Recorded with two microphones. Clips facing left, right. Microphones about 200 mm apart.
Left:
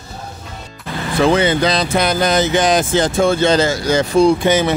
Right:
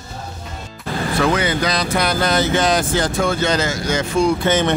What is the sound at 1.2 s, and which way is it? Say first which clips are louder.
Speech: left 6 dB; 25° left (ahead or behind).